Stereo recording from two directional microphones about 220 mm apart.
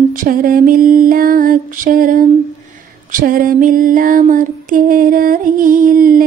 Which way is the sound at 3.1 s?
40° right (ahead or behind).